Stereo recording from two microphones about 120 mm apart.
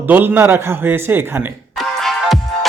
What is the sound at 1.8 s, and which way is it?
Music, centre (ahead or behind).